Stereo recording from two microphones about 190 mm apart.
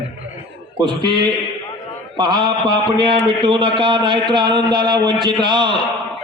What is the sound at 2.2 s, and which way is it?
A man's voice, 20° right (ahead or behind).